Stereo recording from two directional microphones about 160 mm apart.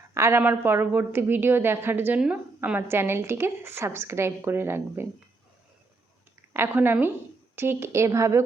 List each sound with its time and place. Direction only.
0.1 s a woman's voice: 15° right (ahead or behind)
6.5 s a woman's voice: 15° right (ahead or behind)